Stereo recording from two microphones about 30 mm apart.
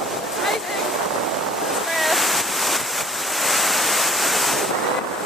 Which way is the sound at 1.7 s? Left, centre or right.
Centre.